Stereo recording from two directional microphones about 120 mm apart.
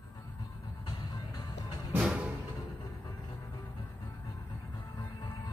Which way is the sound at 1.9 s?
10° right (ahead or behind).